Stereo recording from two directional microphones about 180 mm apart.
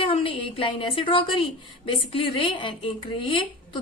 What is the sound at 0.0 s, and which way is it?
A woman's voice, 30° left (ahead or behind).